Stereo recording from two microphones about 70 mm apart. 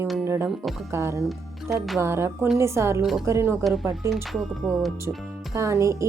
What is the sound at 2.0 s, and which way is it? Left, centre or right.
Speech, right.